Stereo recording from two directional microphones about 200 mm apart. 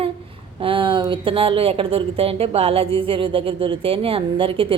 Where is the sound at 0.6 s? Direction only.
25° right (ahead or behind).